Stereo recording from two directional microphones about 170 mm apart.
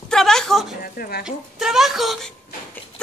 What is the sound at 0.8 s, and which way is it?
Speech, 60° left (ahead or behind).